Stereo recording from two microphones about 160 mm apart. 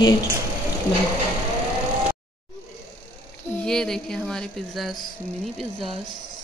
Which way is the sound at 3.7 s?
5° left (ahead or behind).